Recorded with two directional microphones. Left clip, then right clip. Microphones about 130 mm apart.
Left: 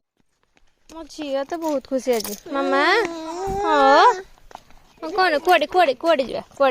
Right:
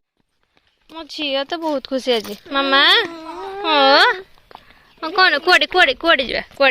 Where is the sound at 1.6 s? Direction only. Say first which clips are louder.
Right 2 dB; 20° right (ahead or behind).